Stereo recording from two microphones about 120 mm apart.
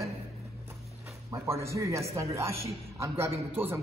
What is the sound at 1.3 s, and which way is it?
A man's voice, 25° right (ahead or behind).